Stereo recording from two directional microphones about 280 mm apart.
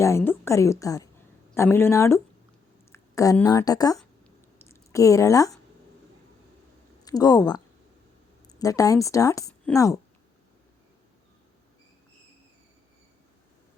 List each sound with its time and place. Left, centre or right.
0.0 s a woman's voice: centre
4.5 s a sound: centre
7.0 s speech: centre